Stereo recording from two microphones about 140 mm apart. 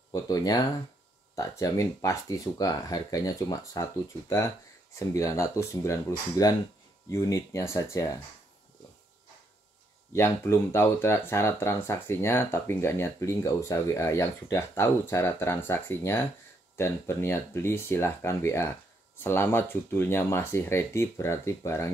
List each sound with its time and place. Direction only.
0.1 s speech: 25° left (ahead or behind)
10.1 s speech: 15° left (ahead or behind)